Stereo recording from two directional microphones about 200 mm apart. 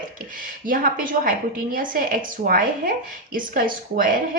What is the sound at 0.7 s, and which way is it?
A woman's voice, 45° right (ahead or behind).